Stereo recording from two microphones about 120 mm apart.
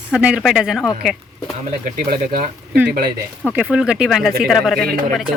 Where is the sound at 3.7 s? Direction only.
5° right (ahead or behind).